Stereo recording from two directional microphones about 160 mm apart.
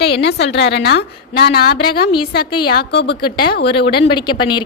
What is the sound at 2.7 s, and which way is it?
Speech, 90° left.